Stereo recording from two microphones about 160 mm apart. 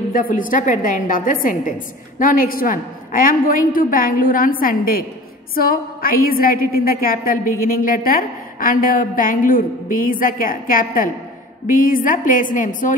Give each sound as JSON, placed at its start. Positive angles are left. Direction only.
{"t": 0.1, "sound": "a woman's voice", "side_deg": 60}